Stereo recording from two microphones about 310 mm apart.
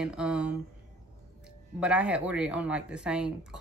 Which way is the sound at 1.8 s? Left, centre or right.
Centre.